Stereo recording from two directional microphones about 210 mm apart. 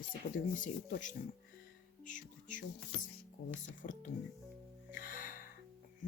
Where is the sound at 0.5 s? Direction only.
40° left (ahead or behind).